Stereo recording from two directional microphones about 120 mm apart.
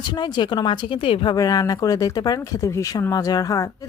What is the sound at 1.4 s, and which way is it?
Speech, 30° left (ahead or behind).